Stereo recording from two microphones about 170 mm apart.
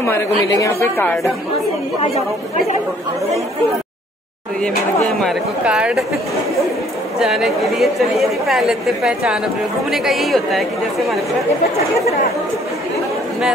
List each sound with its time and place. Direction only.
0.6 s a woman's voice: 15° left (ahead or behind)
5.2 s a woman's voice: 5° right (ahead or behind)
7.2 s a woman's voice: centre (ahead or behind)